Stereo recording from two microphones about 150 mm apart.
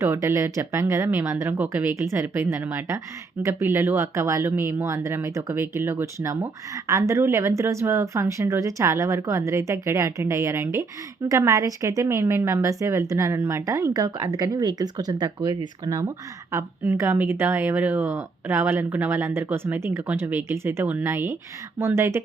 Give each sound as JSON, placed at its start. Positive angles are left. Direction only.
{"t": 0.0, "sound": "speech", "side_deg": -20}